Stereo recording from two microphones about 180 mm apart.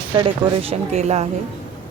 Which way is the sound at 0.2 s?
35° right (ahead or behind).